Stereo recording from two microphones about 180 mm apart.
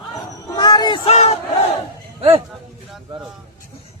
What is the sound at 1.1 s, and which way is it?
Battle cry, 35° left (ahead or behind).